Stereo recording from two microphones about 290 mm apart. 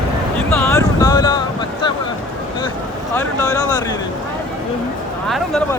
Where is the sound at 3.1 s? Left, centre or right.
Centre.